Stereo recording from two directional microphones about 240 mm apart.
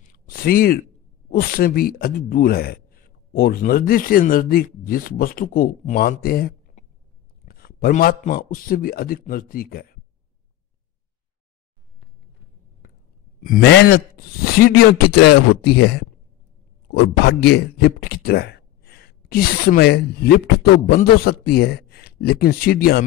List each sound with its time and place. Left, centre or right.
0.1 s a sound: left
1.3 s a man's voice: left
13.4 s a man's voice: left